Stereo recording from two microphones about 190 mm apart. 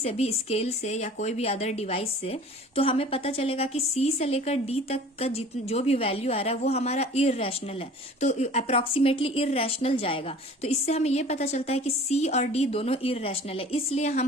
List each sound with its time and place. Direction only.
0.0 s a woman's voice: 35° left (ahead or behind)